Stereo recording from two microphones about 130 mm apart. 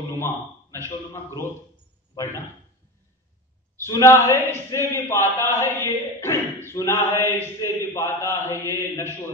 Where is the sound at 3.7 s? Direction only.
20° left (ahead or behind).